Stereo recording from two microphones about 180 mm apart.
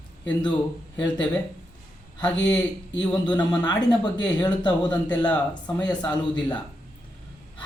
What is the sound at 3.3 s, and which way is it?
Speech, 25° left (ahead or behind).